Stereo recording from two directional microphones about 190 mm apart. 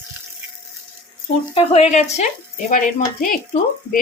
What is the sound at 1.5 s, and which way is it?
Speech, 30° left (ahead or behind).